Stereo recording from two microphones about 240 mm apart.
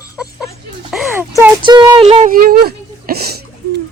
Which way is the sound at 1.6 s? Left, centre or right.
Centre.